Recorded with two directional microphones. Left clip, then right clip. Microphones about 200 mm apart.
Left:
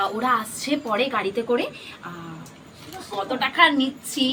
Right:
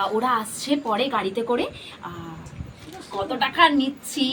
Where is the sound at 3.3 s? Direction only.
10° right (ahead or behind).